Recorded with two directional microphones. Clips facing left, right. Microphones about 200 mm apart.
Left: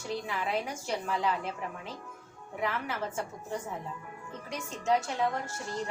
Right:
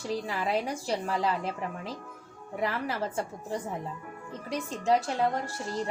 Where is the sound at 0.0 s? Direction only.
35° right (ahead or behind).